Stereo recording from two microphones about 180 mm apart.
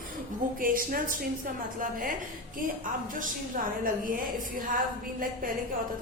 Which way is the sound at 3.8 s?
50° right (ahead or behind).